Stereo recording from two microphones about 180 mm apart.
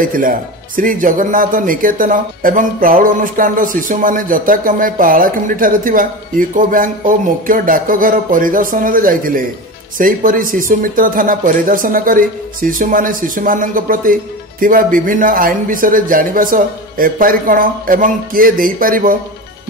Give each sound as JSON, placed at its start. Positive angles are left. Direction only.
{"t": 0.0, "sound": "speech", "side_deg": -50}